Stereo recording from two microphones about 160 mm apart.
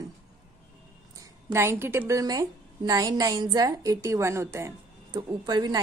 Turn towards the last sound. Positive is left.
turn(degrees=-25)  # may be behind; listen again after turning